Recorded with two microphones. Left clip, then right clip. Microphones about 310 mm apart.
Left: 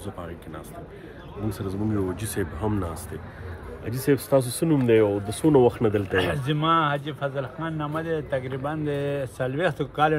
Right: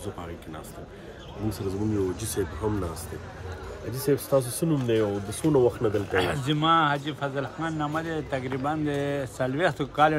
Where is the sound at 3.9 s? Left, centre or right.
Centre.